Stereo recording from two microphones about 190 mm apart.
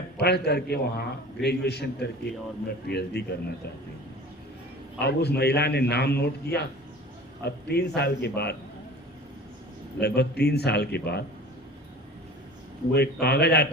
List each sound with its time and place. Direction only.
0.2 s a man's voice: 60° left (ahead or behind)
4.9 s a man's voice: 60° left (ahead or behind)
10.0 s a man's voice: 60° left (ahead or behind)
12.9 s a man's voice: 60° left (ahead or behind)